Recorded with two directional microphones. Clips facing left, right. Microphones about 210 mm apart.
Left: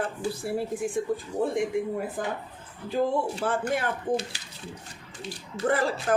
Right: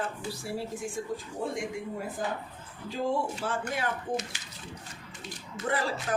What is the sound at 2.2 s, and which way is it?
Speech, 55° left (ahead or behind).